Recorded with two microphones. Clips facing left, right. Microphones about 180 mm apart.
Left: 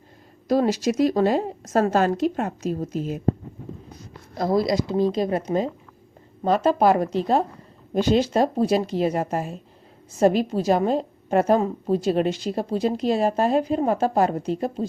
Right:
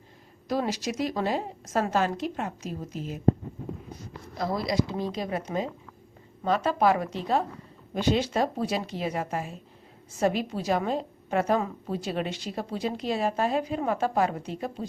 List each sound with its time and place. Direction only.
0.4 s a woman's voice: 40° left (ahead or behind)
4.4 s a woman's voice: 40° left (ahead or behind)